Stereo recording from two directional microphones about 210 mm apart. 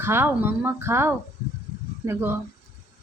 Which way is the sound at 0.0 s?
10° right (ahead or behind).